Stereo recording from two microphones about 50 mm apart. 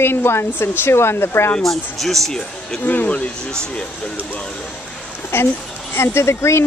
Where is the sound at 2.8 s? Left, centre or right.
Left.